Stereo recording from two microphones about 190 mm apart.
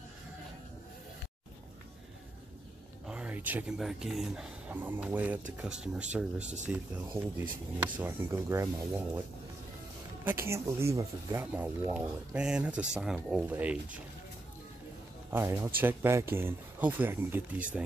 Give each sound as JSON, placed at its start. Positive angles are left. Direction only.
{"t": 3.1, "sound": "speech", "side_deg": -5}
{"t": 6.4, "sound": "speech", "side_deg": -40}
{"t": 7.2, "sound": "speech", "side_deg": -15}
{"t": 10.2, "sound": "speech", "side_deg": -15}
{"t": 15.3, "sound": "speech", "side_deg": -15}